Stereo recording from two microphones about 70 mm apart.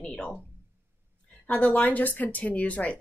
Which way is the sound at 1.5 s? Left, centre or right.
Centre.